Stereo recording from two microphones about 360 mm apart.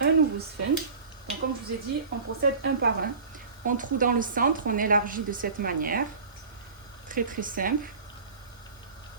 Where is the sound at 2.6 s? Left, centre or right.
Right.